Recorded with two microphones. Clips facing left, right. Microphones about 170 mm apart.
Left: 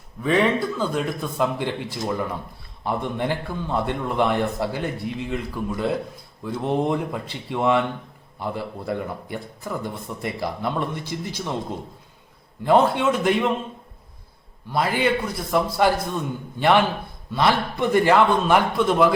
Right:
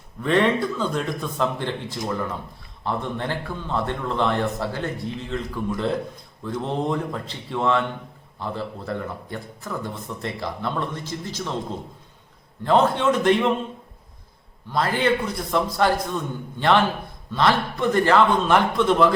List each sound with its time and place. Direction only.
0.2 s a man's voice: centre (ahead or behind)
12.6 s a man's voice: 10° left (ahead or behind)
14.7 s a man's voice: 10° left (ahead or behind)